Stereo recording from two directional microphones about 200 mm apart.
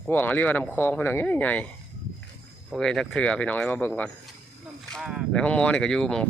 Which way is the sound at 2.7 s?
5° left (ahead or behind).